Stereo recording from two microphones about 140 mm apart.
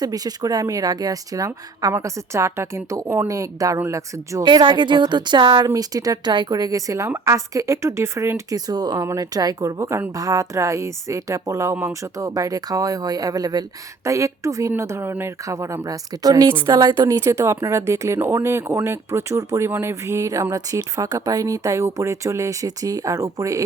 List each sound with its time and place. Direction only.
0.0 s speech: 25° right (ahead or behind)
4.4 s speech: 35° right (ahead or behind)